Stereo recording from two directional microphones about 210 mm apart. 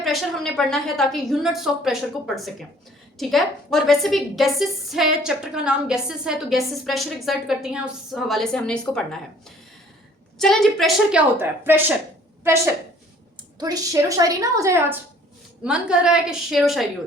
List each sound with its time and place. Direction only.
0.0 s a woman's voice: centre (ahead or behind)
10.3 s a woman's voice: centre (ahead or behind)